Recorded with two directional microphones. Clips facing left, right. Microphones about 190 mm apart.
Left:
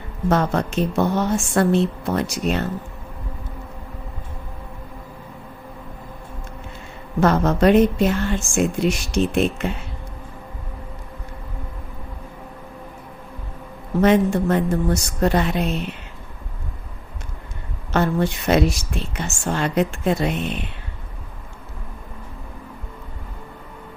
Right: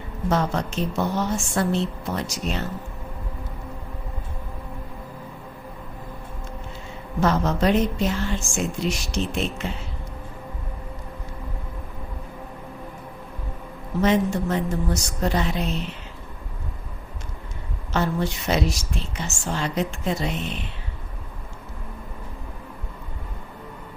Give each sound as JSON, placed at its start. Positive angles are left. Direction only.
{"t": 0.3, "sound": "a woman's voice", "side_deg": 55}
{"t": 7.2, "sound": "a woman's voice", "side_deg": 55}
{"t": 14.0, "sound": "a woman's voice", "side_deg": 55}
{"t": 17.9, "sound": "a woman's voice", "side_deg": 55}